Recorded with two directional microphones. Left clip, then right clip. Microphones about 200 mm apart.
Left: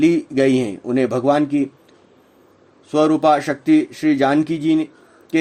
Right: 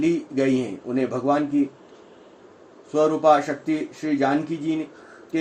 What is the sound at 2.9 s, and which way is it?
Speech, 60° left (ahead or behind).